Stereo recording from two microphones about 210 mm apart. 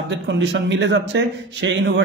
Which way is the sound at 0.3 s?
60° right (ahead or behind).